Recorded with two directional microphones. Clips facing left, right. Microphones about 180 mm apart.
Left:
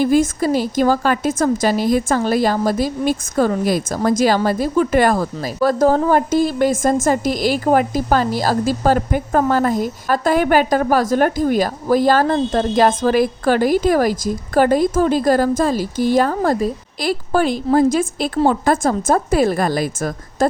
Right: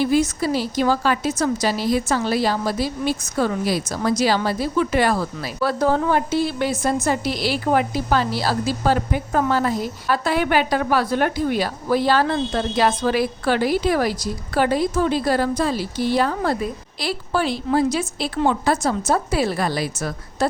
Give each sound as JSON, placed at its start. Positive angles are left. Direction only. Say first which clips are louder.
{"t": 0.0, "sound": "a woman's voice", "louder": "left 4 dB", "side_deg": 45}